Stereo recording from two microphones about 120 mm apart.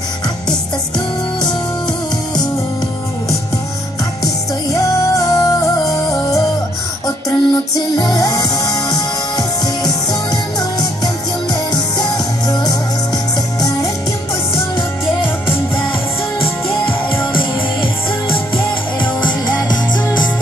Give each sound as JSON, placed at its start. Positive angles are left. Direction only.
{"t": 4.7, "sound": "music", "side_deg": 30}
{"t": 16.3, "sound": "music", "side_deg": 50}
{"t": 18.9, "sound": "music", "side_deg": 40}